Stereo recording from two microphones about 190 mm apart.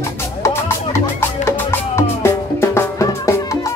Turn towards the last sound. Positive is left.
turn(degrees=15)  # may be behind; listen again after turning